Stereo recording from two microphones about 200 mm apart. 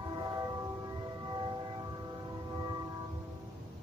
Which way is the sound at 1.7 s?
20° right (ahead or behind).